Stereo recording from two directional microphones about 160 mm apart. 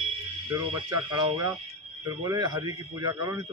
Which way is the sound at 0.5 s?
20° right (ahead or behind).